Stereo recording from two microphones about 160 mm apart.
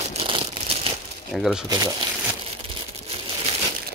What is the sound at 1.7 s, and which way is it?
Speech, 25° right (ahead or behind).